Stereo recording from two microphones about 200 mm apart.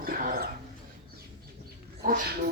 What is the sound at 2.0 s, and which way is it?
Speech, 50° right (ahead or behind).